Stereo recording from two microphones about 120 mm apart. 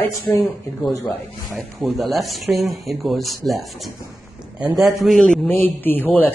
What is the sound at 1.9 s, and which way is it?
A man's voice, centre (ahead or behind).